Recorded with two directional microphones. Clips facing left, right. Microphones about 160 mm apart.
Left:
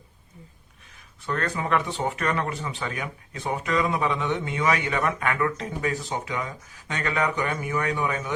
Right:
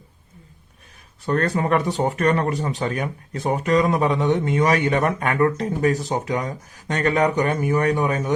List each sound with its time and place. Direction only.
1.3 s speech: 40° right (ahead or behind)